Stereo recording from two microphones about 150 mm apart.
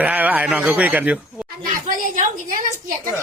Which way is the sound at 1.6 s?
60° right (ahead or behind).